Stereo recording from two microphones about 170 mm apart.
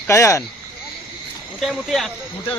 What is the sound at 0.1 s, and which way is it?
Speech, 15° left (ahead or behind).